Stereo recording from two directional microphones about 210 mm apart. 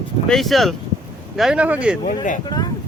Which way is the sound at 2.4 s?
20° left (ahead or behind).